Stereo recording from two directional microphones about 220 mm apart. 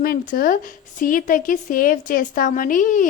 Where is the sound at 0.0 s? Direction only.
40° left (ahead or behind).